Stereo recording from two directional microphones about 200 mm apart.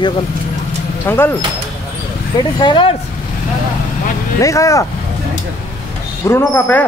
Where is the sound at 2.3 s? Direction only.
25° left (ahead or behind).